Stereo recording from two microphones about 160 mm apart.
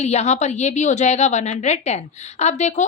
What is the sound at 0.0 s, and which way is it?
Speech, 45° left (ahead or behind).